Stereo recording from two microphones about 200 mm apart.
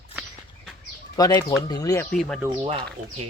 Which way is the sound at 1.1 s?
15° left (ahead or behind).